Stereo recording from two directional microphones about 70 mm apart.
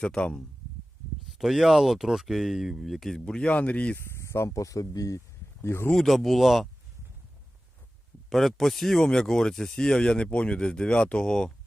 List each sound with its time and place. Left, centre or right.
0.0 s speech: centre
1.3 s speech: centre
3.2 s speech: centre
4.2 s speech: left
5.6 s speech: left
5.9 s speech: centre
8.3 s speech: centre